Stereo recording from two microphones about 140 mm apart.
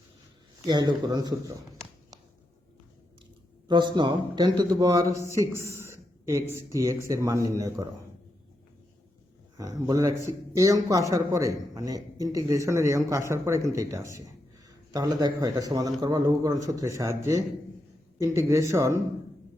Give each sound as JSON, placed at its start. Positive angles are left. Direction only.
{"t": 0.7, "sound": "a man's voice", "side_deg": -30}
{"t": 3.7, "sound": "a man's voice", "side_deg": -35}
{"t": 9.6, "sound": "a man's voice", "side_deg": -25}